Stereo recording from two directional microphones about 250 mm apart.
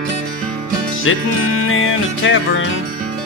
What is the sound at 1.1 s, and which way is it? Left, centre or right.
Music, left.